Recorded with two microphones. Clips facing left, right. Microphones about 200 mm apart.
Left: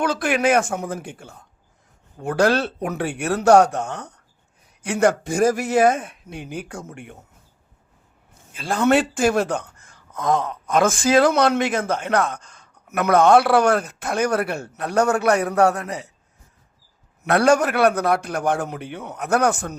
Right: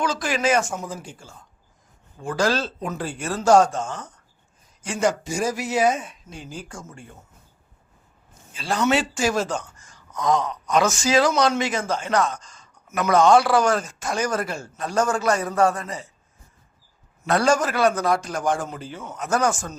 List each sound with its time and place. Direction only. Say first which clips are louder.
0.0 s speech: left 3 dB; 60° left (ahead or behind)
8.5 s speech: left 4 dB; 50° left (ahead or behind); by 16.1 s 65° left (ahead or behind)
17.2 s speech: left 3 dB; 60° left (ahead or behind)